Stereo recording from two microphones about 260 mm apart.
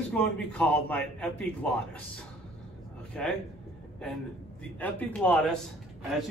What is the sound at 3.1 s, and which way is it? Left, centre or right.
Speech, centre.